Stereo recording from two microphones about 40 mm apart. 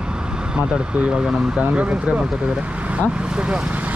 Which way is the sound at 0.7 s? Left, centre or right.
Right.